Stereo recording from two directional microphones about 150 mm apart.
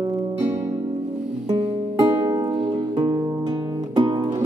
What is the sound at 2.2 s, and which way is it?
Music, 25° right (ahead or behind).